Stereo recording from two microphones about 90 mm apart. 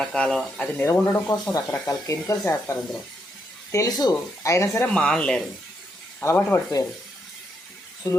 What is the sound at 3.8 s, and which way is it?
Speech, 40° left (ahead or behind).